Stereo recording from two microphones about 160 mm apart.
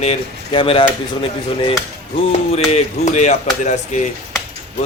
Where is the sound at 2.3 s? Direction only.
40° left (ahead or behind).